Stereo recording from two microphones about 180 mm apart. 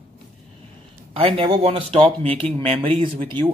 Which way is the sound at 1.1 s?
30° right (ahead or behind).